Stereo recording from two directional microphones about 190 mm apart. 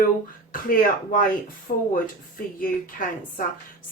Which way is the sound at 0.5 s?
45° left (ahead or behind).